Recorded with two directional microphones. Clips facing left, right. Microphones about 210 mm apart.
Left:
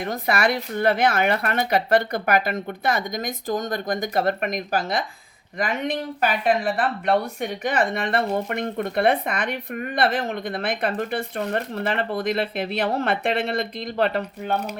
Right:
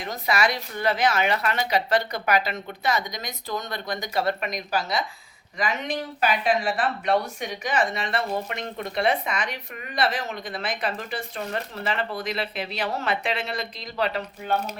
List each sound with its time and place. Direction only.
0.0 s speech: 55° left (ahead or behind)